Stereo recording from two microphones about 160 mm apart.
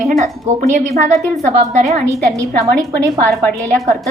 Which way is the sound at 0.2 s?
45° right (ahead or behind).